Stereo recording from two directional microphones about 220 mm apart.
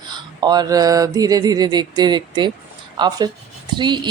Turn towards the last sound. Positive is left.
turn(degrees=-20)  # may be behind; listen again after turning